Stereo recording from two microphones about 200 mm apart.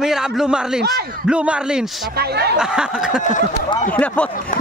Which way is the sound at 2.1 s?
55° right (ahead or behind).